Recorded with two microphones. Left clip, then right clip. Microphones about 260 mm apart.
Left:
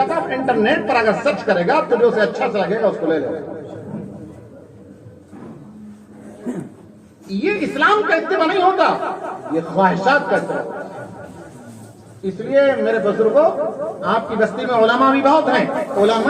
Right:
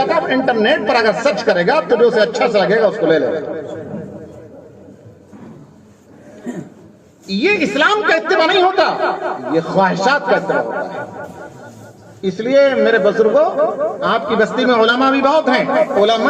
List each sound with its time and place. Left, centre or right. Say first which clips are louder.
0.0 s speech: right 4 dB; right
7.3 s speech: right 5 dB; right
12.2 s speech: right 3 dB; right